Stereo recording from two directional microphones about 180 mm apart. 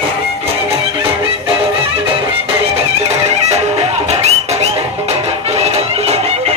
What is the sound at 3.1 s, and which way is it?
Music, 35° right (ahead or behind).